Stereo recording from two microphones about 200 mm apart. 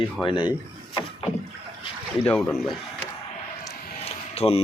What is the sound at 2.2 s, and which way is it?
Speech, 5° left (ahead or behind).